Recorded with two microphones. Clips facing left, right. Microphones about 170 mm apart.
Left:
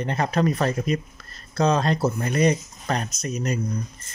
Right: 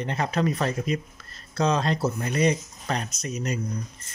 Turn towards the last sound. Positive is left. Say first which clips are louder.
# left 3 dB
turn(degrees=45)  # may be behind; listen again after turning